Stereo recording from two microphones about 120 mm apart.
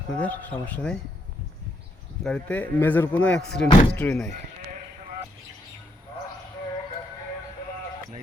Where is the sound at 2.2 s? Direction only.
10° left (ahead or behind).